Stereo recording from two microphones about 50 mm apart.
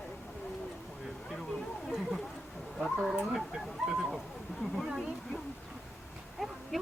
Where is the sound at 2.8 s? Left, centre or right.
Centre.